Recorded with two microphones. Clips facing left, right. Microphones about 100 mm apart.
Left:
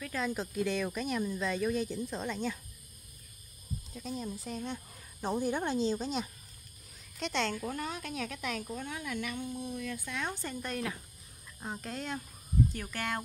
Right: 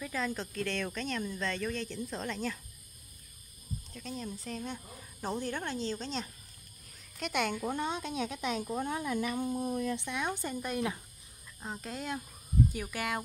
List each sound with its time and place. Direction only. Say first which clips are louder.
0.0 s speech: left 1 dB; centre (ahead or behind)
3.9 s speech: left 2 dB; 5° left (ahead or behind)
5.5 s speech: left 5 dB; 15° left (ahead or behind)
7.2 s speech: right 1 dB; 5° right (ahead or behind)
7.5 s speech: right 3 dB; 25° right (ahead or behind)
8.7 s speech: right 5 dB; 35° right (ahead or behind)
9.9 s speech: right 3 dB; 15° right (ahead or behind)
11.6 s speech: even; centre (ahead or behind)